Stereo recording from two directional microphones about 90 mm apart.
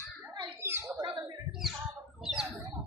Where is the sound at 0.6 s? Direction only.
30° right (ahead or behind).